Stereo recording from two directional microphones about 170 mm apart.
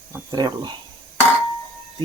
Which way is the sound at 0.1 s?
25° right (ahead or behind).